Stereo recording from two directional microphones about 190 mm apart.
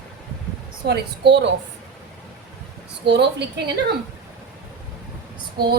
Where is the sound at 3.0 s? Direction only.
65° right (ahead or behind).